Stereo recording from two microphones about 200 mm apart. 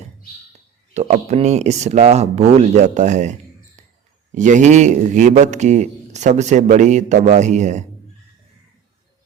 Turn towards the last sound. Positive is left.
turn(degrees=-35)  # may be behind; listen again after turning